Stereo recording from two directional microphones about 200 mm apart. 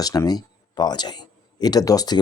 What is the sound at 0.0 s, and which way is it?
Speech, 20° left (ahead or behind).